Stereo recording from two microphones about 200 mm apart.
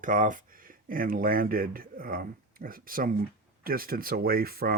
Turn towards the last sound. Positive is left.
turn(degrees=-50)  # may be behind; listen again after turning